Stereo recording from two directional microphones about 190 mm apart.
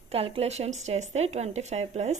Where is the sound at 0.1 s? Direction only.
30° right (ahead or behind).